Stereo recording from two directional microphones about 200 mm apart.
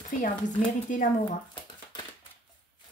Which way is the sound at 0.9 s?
40° left (ahead or behind).